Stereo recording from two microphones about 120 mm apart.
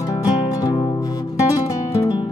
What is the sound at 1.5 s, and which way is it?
Guitar, 30° left (ahead or behind).